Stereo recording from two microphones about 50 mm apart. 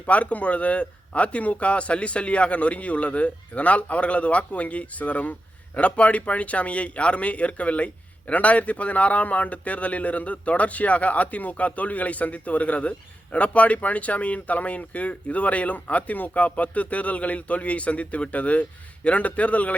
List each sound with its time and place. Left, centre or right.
0.0 s speech: left